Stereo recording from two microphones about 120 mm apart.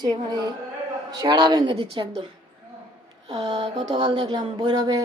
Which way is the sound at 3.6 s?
80° right.